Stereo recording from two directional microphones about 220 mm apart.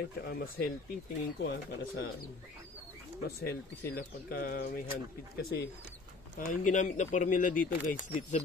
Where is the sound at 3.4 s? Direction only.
45° left (ahead or behind).